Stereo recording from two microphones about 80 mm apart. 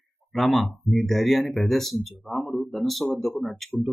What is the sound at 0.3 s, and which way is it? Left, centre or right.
A man's voice, centre.